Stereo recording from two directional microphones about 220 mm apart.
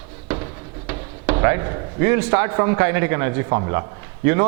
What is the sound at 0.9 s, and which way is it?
Speech, 15° right (ahead or behind).